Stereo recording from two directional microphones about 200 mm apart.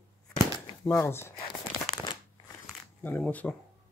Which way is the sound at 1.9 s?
20° left (ahead or behind).